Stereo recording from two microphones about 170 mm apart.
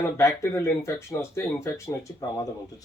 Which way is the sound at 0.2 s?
15° left (ahead or behind).